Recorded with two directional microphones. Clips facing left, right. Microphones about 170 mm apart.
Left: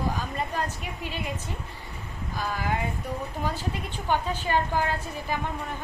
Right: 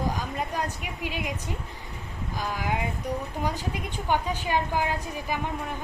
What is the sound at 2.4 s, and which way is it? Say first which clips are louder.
A woman's voice: even; 15° right (ahead or behind).